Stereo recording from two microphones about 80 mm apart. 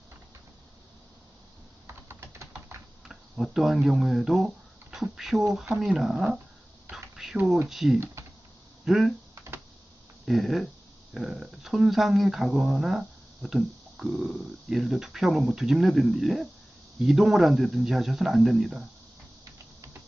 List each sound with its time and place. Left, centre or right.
1.9 s typing: right
3.1 s speech: centre
6.9 s a sound: centre
7.7 s speech: centre
7.9 s speech: right
8.8 s speech: centre
9.3 s computer keyboard: right
10.2 s speech: centre